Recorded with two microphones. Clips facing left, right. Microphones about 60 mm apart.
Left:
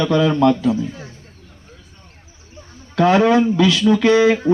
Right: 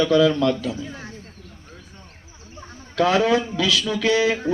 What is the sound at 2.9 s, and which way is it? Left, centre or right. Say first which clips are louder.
Speech: left 5 dB; left.